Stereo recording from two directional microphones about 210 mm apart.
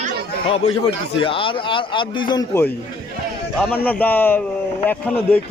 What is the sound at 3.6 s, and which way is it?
Speech, 5° left (ahead or behind).